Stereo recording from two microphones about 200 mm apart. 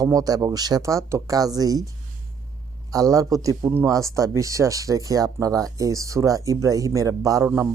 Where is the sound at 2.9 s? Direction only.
15° right (ahead or behind).